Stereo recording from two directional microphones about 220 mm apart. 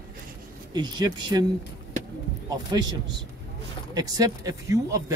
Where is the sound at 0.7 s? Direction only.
20° right (ahead or behind).